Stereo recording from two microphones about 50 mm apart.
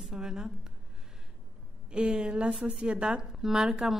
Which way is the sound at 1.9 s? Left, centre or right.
Centre.